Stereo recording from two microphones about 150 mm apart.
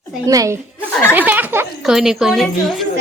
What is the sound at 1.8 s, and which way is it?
Speech, 5° right (ahead or behind).